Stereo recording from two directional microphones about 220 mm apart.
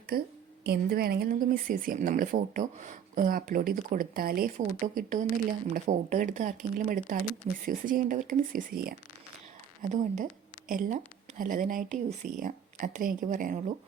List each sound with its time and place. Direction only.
0.1 s a woman's voice: 45° right (ahead or behind)
9.9 s speech: 30° right (ahead or behind)